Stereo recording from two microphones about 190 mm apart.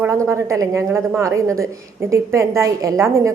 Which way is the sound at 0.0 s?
15° right (ahead or behind).